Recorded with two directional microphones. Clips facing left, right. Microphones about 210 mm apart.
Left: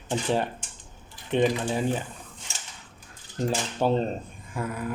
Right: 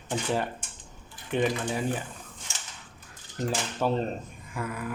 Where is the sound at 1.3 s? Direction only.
25° left (ahead or behind).